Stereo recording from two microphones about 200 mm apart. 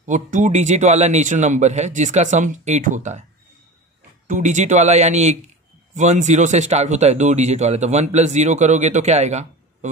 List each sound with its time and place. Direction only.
0.0 s speech: 40° right (ahead or behind)
4.3 s speech: 35° right (ahead or behind)